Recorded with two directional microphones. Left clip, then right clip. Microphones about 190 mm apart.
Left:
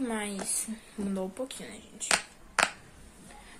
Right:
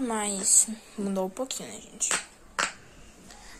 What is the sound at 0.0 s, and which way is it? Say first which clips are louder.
A woman's voice: right 4 dB; 15° right (ahead or behind).